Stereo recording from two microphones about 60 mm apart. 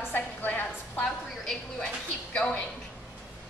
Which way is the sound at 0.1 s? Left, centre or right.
Left.